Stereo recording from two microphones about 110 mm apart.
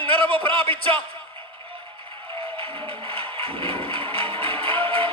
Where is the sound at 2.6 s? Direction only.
55° right (ahead or behind).